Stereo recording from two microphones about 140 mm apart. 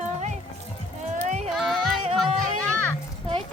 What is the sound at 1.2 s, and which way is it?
Music, 55° right (ahead or behind).